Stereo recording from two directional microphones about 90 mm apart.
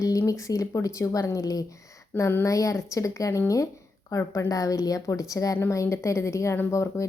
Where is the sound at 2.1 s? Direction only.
25° left (ahead or behind).